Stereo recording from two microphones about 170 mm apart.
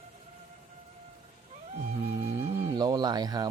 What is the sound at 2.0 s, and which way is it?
Music, 15° right (ahead or behind).